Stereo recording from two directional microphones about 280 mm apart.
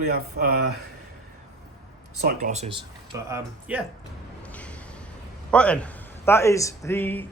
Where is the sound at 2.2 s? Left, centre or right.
Right; by 3.9 s centre.